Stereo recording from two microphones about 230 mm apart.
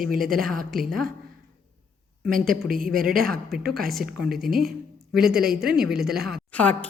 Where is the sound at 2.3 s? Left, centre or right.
Right.